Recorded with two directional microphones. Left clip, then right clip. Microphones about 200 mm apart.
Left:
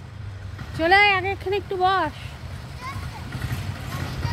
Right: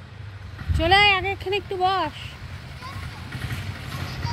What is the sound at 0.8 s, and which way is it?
Speech, 10° right (ahead or behind).